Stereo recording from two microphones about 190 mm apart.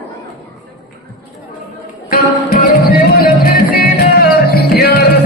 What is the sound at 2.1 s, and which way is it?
Music, 50° left (ahead or behind).